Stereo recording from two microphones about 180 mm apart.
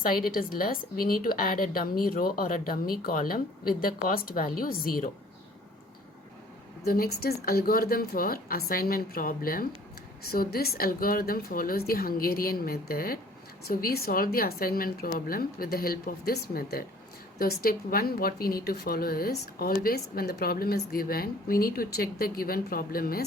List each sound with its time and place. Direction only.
0.0 s a woman's voice: 50° left (ahead or behind)
6.8 s speech: 55° left (ahead or behind)